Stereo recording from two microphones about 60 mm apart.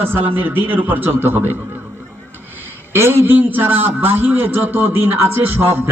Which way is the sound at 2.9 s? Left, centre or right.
Right.